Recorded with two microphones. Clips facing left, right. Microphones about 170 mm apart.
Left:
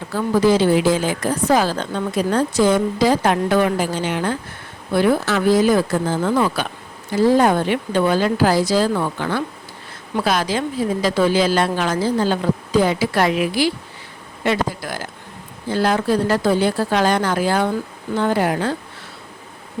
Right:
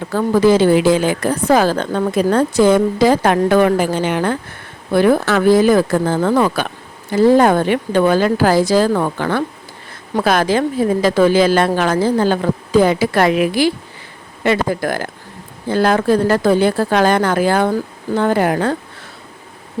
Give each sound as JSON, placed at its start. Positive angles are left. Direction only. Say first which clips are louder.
{"t": 0.1, "sound": "a woman's voice", "louder": "right 3 dB", "side_deg": -55}